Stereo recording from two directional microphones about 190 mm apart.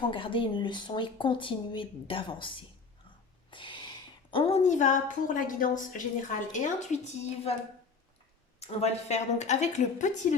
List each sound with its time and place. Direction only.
0.0 s a woman's voice: 25° left (ahead or behind)
8.6 s a woman's voice: 35° left (ahead or behind)